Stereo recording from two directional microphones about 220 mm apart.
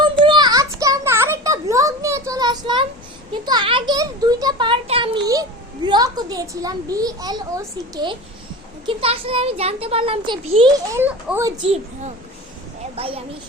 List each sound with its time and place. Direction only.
0.3 s a sound: 20° right (ahead or behind)
8.9 s a child's voice: 25° right (ahead or behind)
11.0 s a child's voice: 10° right (ahead or behind)